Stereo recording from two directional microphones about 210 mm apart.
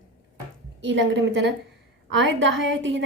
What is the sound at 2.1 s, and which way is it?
Speech, 60° right (ahead or behind).